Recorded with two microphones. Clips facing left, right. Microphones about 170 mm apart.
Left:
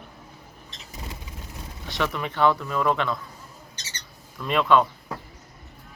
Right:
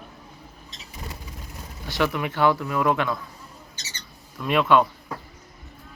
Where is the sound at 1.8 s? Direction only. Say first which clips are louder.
Right 3 dB; 5° right (ahead or behind).